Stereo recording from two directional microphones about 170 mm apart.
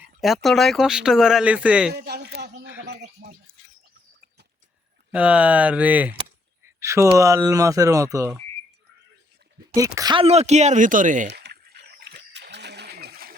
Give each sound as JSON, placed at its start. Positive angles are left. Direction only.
{"t": 0.2, "sound": "speech", "side_deg": 0}
{"t": 1.9, "sound": "a man's voice", "side_deg": -75}
{"t": 5.1, "sound": "speech", "side_deg": -10}
{"t": 9.7, "sound": "speech", "side_deg": -20}
{"t": 10.2, "sound": "speech", "side_deg": -40}
{"t": 11.3, "sound": "a sound", "side_deg": -85}